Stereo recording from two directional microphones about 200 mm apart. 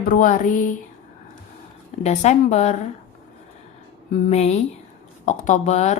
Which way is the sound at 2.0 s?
35° left (ahead or behind).